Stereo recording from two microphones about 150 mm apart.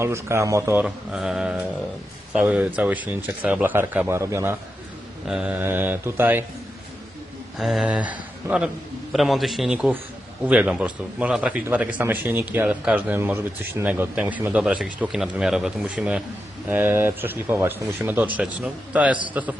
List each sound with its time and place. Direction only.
0.0 s speech: 20° right (ahead or behind)
0.9 s a man's voice: 5° right (ahead or behind); by 4.5 s 20° right (ahead or behind)
5.3 s speech: 5° right (ahead or behind)
7.6 s a man's voice: centre (ahead or behind)